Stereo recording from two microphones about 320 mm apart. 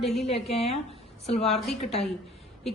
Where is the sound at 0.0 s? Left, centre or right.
Centre.